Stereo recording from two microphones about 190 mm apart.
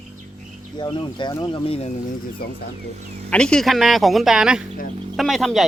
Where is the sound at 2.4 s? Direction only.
55° left (ahead or behind).